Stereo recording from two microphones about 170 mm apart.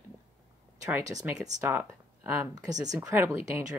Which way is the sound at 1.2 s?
10° right (ahead or behind).